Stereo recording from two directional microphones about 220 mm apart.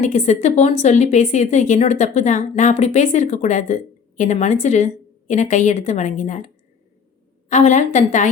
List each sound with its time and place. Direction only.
0.0 s a woman's voice: 30° left (ahead or behind)
7.5 s a woman's voice: 30° left (ahead or behind)